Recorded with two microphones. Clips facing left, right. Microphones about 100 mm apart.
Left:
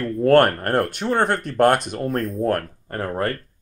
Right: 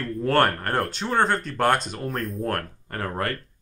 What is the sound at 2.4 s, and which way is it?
Speech, 30° left (ahead or behind).